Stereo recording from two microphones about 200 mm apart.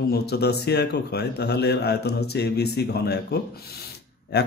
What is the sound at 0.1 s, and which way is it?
A man's voice, 55° left (ahead or behind).